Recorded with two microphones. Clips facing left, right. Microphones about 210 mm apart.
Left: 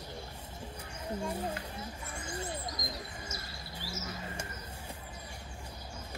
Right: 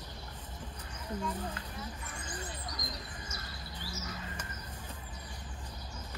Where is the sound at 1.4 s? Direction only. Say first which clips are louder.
Left 3 dB; 25° left (ahead or behind).